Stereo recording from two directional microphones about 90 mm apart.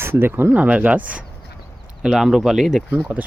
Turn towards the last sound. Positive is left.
turn(degrees=-15)  # may be behind; listen again after turning